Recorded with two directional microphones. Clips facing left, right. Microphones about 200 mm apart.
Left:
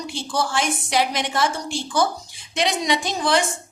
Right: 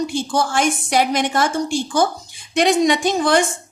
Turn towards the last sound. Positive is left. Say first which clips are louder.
# right 5 dB
turn(degrees=-50)  # may be behind; listen again after turning